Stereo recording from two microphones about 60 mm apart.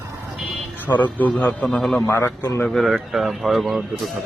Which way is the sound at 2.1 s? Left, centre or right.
Left.